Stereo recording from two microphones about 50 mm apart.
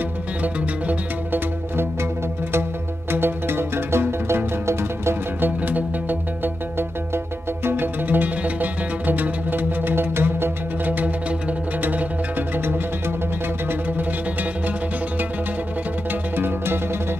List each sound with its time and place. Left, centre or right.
0.4 s music: right
3.1 s music: right
5.4 s music: right
11.8 s music: right
16.3 s music: right